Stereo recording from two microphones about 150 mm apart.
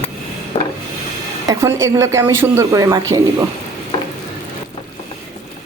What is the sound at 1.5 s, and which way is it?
Speech, 20° right (ahead or behind).